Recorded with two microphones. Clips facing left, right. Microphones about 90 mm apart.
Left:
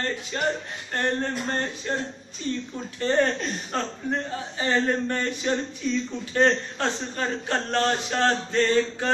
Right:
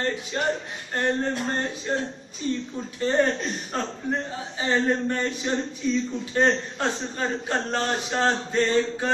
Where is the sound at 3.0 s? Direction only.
10° right (ahead or behind).